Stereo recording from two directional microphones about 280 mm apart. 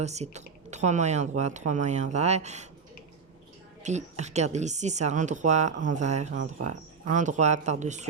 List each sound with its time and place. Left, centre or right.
0.0 s speech: right
3.8 s speech: right